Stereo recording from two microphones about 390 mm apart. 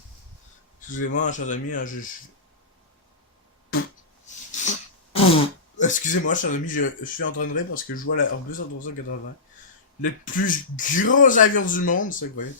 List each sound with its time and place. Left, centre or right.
0.9 s speech: centre
4.5 s speech: centre
10.0 s speech: centre